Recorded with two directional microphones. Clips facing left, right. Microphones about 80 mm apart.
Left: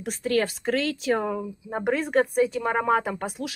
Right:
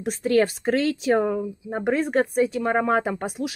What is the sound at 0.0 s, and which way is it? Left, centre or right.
Speech, right.